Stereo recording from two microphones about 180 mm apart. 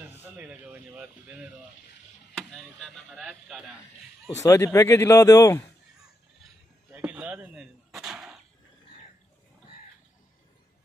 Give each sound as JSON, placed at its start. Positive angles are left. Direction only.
{"t": 0.2, "sound": "speech", "side_deg": -10}
{"t": 2.5, "sound": "speech", "side_deg": 5}
{"t": 4.4, "sound": "a man's voice", "side_deg": 15}
{"t": 6.9, "sound": "a sound", "side_deg": -5}